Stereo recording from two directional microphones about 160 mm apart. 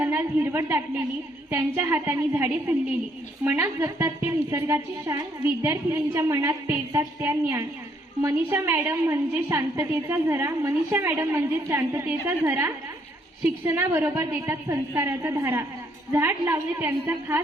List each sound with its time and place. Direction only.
0.0 s a woman's voice: 15° right (ahead or behind)